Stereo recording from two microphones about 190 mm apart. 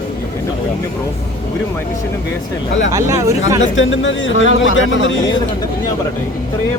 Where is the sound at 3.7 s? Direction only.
85° left.